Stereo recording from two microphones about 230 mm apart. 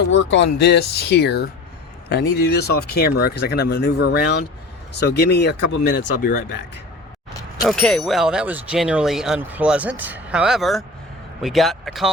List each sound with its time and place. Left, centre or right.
0.1 s speech: left
7.7 s speech: centre